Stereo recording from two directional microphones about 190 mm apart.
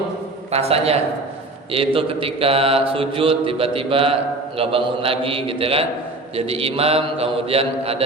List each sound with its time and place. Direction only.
0.5 s a man's voice: 35° right (ahead or behind)
1.7 s mantra: 30° right (ahead or behind)
6.3 s a man's voice: 30° right (ahead or behind)